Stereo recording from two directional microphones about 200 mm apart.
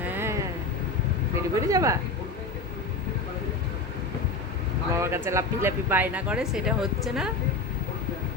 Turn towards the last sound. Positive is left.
turn(degrees=0)  # may be behind; listen again after turning